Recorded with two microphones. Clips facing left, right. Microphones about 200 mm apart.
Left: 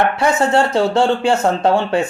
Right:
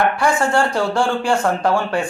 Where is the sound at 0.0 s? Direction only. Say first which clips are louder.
Left 2 dB; 25° left (ahead or behind).